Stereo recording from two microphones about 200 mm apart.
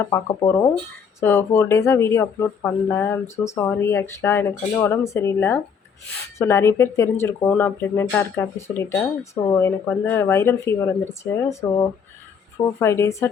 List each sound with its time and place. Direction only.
0.0 s speech: 15° left (ahead or behind)